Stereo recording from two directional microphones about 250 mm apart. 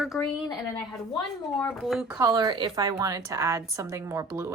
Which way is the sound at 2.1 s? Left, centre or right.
Centre.